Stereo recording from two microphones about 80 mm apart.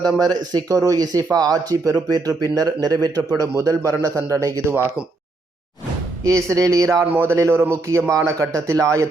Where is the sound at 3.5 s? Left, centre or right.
Right.